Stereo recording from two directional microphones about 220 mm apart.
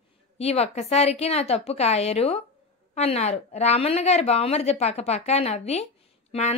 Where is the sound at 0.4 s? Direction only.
30° left (ahead or behind).